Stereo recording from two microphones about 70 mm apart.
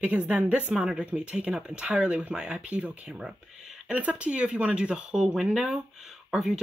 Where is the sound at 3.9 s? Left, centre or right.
Centre.